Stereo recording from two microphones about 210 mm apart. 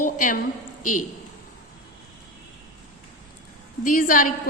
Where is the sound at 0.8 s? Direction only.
90° left.